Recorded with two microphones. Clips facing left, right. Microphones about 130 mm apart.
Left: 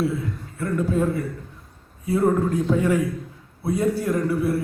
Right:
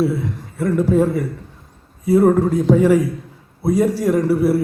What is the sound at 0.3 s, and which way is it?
Speech, 90° right.